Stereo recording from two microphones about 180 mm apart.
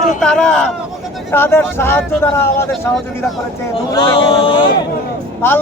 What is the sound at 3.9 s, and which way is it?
Speech, 30° left (ahead or behind).